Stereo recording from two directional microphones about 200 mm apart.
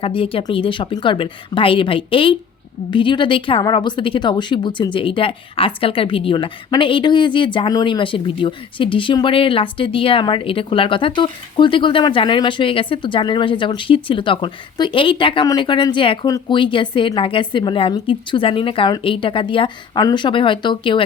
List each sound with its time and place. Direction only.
0.0 s a woman's voice: 25° left (ahead or behind)